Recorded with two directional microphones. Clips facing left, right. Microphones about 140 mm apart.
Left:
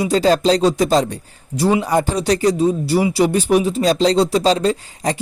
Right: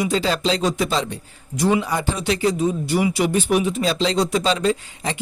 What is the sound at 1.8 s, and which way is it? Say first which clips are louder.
Speech: left 6 dB; 45° left (ahead or behind).